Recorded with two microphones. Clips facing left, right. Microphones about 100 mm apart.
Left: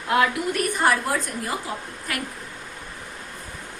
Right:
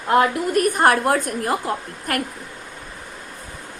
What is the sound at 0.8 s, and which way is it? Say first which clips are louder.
A woman's voice: right 3 dB; 55° right (ahead or behind).